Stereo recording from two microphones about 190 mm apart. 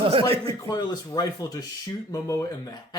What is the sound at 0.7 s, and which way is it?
Speech, 20° left (ahead or behind).